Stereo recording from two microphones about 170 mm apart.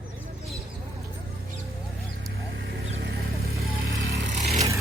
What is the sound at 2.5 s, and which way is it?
Vehicle, 80° right.